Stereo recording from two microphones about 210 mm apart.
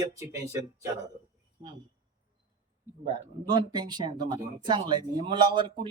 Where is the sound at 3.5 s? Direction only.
20° right (ahead or behind).